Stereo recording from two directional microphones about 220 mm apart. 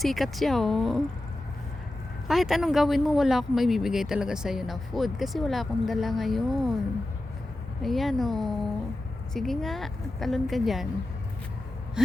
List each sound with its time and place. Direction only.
0.0 s speech: centre (ahead or behind)
2.2 s speech: centre (ahead or behind)
7.8 s speech: centre (ahead or behind)
12.0 s speech: 5° right (ahead or behind)